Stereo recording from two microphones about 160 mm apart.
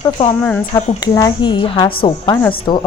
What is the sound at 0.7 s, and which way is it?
A woman's voice, 25° left (ahead or behind).